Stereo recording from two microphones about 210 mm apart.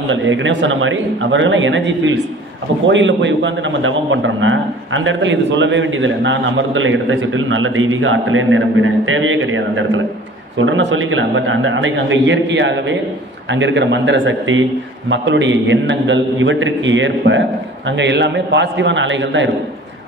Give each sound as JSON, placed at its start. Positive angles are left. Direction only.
{"t": 0.1, "sound": "a man's voice", "side_deg": -65}